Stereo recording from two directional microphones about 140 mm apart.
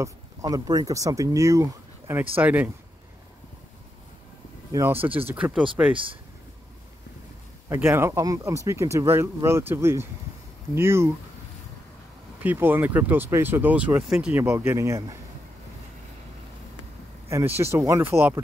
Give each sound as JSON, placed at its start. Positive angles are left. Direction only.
{"t": 0.0, "sound": "speech", "side_deg": -25}
{"t": 4.7, "sound": "speech", "side_deg": -15}
{"t": 7.7, "sound": "speech", "side_deg": -20}
{"t": 12.4, "sound": "speech", "side_deg": -15}
{"t": 17.6, "sound": "speech", "side_deg": -20}